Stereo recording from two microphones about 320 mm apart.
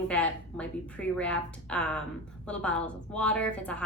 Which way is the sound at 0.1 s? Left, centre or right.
Centre.